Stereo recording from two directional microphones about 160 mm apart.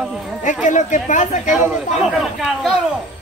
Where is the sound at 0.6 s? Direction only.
50° left (ahead or behind).